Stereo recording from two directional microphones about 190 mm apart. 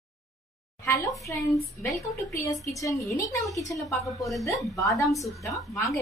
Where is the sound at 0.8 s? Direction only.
15° left (ahead or behind).